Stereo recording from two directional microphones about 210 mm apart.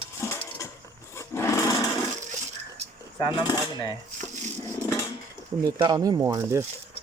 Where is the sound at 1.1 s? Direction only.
15° left (ahead or behind).